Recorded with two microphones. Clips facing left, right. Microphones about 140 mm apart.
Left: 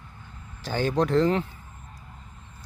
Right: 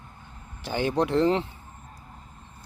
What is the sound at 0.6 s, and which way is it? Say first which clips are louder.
Speech: left 1 dB; 20° right (ahead or behind).